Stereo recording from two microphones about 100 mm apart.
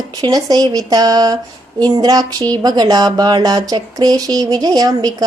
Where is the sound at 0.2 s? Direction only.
40° right (ahead or behind).